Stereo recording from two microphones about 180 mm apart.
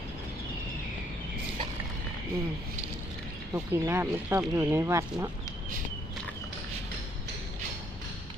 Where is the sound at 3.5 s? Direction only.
15° right (ahead or behind).